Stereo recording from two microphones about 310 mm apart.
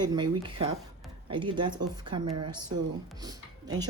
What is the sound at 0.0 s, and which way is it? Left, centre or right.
Speech, centre.